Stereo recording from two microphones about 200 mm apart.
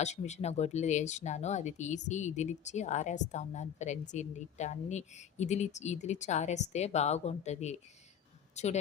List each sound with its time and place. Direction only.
0.0 s speech: 35° left (ahead or behind)